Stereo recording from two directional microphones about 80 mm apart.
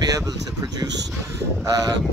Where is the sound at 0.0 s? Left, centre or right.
Right.